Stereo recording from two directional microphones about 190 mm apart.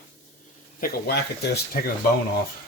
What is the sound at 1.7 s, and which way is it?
Speech, 50° left (ahead or behind).